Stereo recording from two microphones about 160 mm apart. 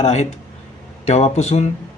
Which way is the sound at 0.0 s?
40° left (ahead or behind).